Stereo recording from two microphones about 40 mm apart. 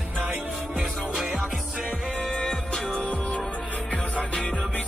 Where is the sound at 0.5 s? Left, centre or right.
Centre.